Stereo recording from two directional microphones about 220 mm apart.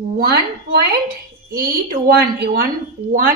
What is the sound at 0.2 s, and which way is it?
A woman's voice, 45° right (ahead or behind).